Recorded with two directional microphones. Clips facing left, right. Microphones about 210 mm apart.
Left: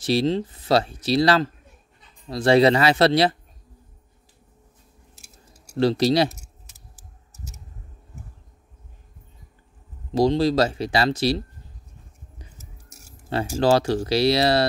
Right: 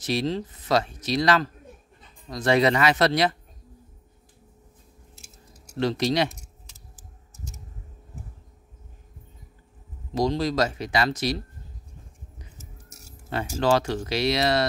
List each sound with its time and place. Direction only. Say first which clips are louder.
0.0 s speech: left 5 dB; 30° left (ahead or behind)
5.8 s speech: left 5 dB; 35° left (ahead or behind)
10.1 s speech: left 5 dB; 30° left (ahead or behind)
13.3 s speech: left 3 dB; 35° left (ahead or behind)